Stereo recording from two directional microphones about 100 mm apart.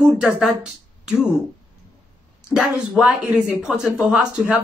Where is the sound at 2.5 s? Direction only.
5° right (ahead or behind).